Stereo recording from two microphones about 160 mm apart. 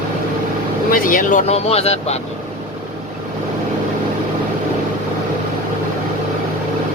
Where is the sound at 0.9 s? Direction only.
60° left (ahead or behind); by 1.9 s 40° left (ahead or behind).